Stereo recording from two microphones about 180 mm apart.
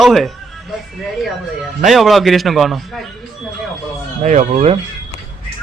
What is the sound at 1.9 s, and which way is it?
A man's voice, centre (ahead or behind).